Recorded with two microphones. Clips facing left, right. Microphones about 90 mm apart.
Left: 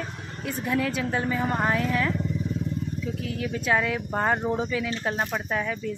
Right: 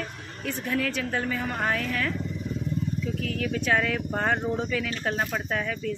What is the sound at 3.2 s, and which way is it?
Speech, 20° left (ahead or behind).